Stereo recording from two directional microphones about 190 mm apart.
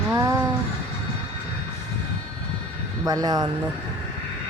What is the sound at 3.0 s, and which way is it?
Speech, 20° right (ahead or behind).